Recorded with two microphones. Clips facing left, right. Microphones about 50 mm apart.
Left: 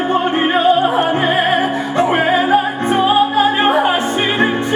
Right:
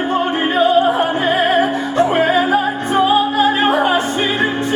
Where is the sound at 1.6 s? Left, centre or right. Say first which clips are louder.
Right 1 dB; left.